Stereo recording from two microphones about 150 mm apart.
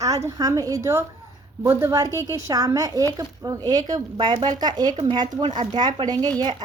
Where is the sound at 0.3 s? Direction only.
25° right (ahead or behind).